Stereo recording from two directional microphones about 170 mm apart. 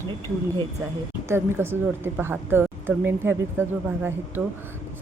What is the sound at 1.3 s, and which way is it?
A woman's voice, 15° right (ahead or behind).